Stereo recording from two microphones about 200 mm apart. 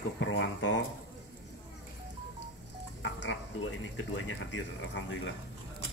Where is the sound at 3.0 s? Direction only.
65° left (ahead or behind).